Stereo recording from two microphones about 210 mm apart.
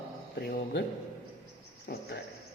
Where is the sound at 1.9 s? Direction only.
50° left (ahead or behind).